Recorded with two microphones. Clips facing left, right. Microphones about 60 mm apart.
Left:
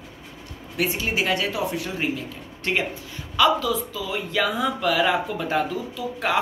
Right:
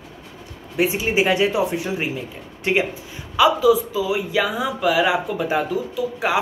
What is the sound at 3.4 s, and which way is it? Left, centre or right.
Speech, centre.